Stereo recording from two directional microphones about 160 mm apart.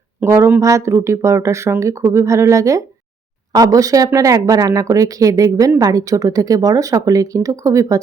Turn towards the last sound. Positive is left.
turn(degrees=-20)  # may be behind; listen again after turning